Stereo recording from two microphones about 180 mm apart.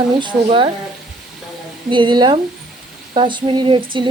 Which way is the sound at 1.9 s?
25° right (ahead or behind).